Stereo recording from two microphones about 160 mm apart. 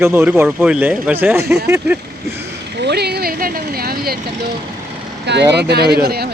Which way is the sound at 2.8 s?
90° right.